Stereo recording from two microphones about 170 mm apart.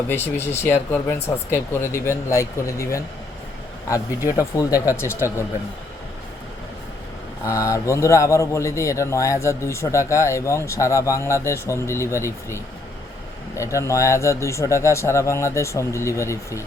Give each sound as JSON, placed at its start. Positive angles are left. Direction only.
{"t": 0.1, "sound": "a man's voice", "side_deg": 15}
{"t": 7.4, "sound": "a man's voice", "side_deg": 20}